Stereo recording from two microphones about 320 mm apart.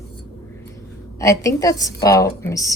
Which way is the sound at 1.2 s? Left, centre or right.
Centre.